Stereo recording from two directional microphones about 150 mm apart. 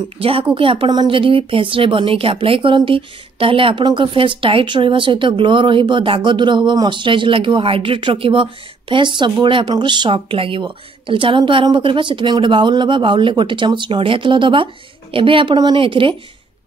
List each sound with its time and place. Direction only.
0.2 s speech: 40° right (ahead or behind)